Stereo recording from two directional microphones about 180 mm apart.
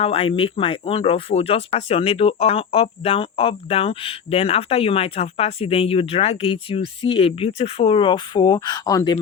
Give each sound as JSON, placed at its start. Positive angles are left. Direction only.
{"t": 0.0, "sound": "speech", "side_deg": 30}